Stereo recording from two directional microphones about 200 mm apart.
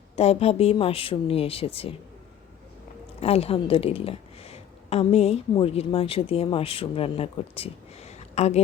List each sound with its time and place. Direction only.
0.2 s speech: 30° left (ahead or behind)
3.2 s a woman's voice: 30° left (ahead or behind)